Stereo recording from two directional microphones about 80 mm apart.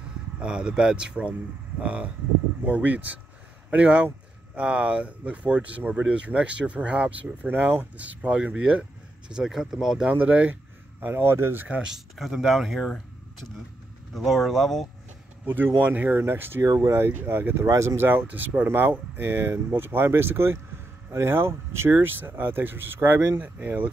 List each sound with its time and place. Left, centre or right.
0.4 s speech: centre
10.1 s speech: centre
12.2 s speech: centre
14.1 s speech: centre
15.4 s speech: right
16.6 s speech: right